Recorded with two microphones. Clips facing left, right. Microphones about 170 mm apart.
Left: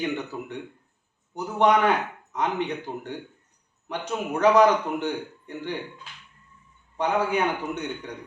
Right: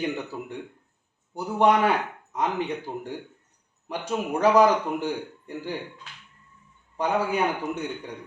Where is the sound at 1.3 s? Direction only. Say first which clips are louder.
Even; 10° right (ahead or behind).